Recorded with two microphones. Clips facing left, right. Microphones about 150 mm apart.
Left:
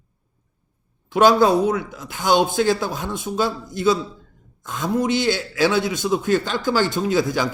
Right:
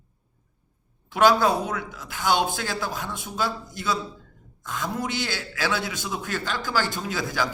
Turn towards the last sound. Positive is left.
turn(degrees=25)  # may be behind; listen again after turning